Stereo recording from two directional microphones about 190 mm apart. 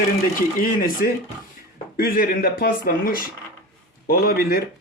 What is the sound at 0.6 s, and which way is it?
Speech, 50° left (ahead or behind).